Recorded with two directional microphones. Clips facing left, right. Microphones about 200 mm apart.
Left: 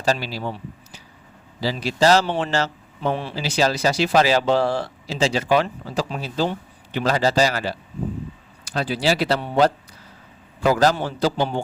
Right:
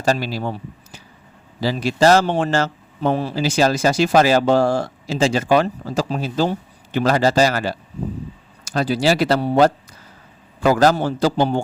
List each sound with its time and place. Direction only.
0.0 s a man's voice: 50° right (ahead or behind)